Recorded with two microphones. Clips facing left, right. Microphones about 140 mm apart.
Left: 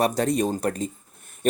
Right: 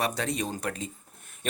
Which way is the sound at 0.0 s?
45° left (ahead or behind).